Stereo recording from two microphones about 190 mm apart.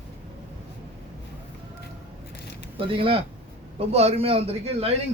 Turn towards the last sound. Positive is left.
turn(degrees=-30)  # may be behind; listen again after turning